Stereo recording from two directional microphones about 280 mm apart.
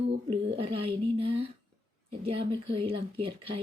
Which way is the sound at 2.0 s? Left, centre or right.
Centre.